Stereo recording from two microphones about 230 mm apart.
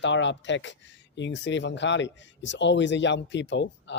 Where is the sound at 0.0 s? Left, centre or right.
Left.